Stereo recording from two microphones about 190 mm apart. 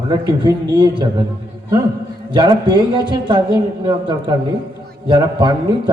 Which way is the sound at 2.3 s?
25° right (ahead or behind).